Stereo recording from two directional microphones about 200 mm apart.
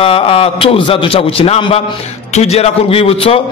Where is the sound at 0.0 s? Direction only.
25° left (ahead or behind).